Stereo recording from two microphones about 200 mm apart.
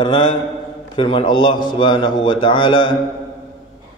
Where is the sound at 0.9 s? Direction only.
25° left (ahead or behind).